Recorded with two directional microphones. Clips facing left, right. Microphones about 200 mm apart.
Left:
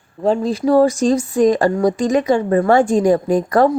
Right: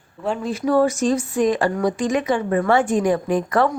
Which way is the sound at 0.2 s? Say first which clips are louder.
Left 7 dB; 35° left (ahead or behind).